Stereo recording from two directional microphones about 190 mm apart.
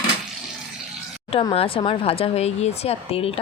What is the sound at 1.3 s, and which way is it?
Speech, 30° left (ahead or behind).